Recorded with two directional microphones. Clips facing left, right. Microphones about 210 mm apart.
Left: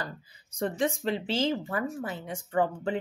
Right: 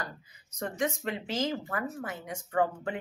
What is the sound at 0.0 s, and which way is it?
A woman's voice, 30° left (ahead or behind).